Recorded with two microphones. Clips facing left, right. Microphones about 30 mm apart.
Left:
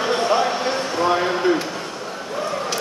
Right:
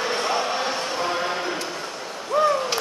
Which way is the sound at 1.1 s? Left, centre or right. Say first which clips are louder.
Left 7 dB; centre.